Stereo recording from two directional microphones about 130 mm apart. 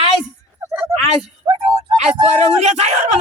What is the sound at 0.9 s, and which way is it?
A woman's voice, 50° right (ahead or behind).